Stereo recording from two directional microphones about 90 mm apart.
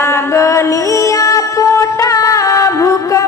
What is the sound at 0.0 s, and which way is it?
Music, 30° left (ahead or behind).